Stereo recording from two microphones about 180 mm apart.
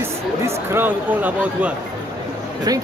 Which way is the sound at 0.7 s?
10° right (ahead or behind).